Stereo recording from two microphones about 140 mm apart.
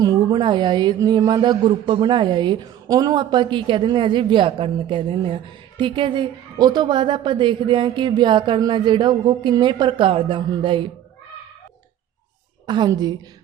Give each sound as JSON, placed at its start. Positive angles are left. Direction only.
{"t": 0.0, "sound": "speech", "side_deg": -30}
{"t": 12.6, "sound": "a woman's voice", "side_deg": -35}